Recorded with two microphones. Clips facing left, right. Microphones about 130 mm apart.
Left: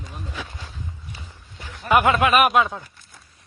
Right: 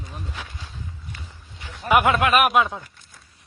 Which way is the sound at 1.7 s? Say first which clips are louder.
Left 1 dB; 5° right (ahead or behind).